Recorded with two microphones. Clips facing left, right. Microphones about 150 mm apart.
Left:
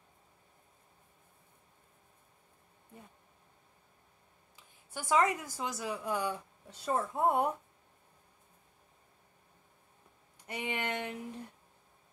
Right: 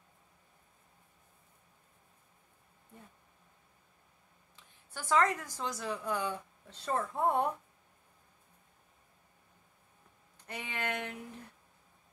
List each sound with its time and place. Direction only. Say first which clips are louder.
4.9 s a woman's voice: even; 15° left (ahead or behind)
10.4 s a woman's voice: left 2 dB; 15° left (ahead or behind)